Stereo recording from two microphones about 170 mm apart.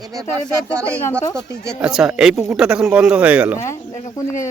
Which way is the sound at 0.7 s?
10° left (ahead or behind).